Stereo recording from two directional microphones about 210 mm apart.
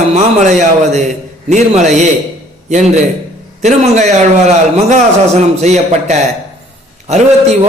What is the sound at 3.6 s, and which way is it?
A man's voice, 35° right (ahead or behind).